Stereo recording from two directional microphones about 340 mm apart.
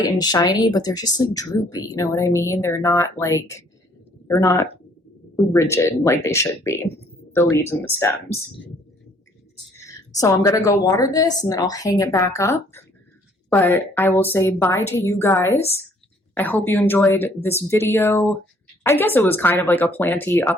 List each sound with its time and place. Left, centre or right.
0.2 s speech: centre
10.2 s speech: centre